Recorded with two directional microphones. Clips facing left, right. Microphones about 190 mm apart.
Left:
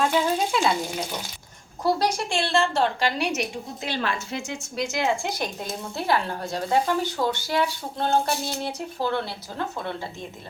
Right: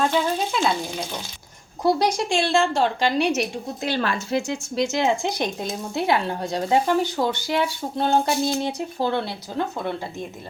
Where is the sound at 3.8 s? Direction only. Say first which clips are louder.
Right 4 dB; 45° right (ahead or behind).